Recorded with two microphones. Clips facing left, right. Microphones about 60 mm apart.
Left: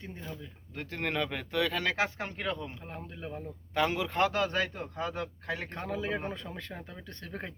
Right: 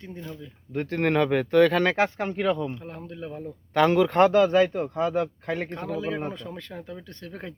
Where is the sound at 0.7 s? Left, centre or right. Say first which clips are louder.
Right 10 dB; right.